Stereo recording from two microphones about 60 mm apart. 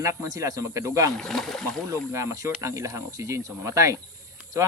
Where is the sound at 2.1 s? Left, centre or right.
Right.